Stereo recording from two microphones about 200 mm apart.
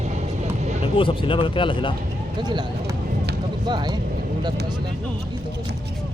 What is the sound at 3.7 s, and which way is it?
Speech, 20° right (ahead or behind).